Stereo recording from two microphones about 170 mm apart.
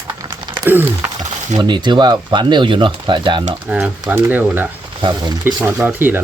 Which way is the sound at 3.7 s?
5° right (ahead or behind).